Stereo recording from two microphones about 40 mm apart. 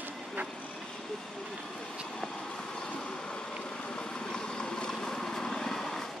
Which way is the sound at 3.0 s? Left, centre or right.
Left.